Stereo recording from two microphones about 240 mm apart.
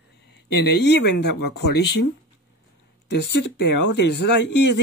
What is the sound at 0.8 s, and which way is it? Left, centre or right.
Speech, left.